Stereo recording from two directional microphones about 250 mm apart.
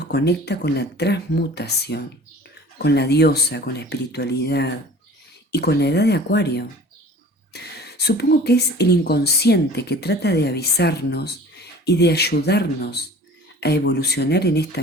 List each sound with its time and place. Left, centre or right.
0.0 s speech: left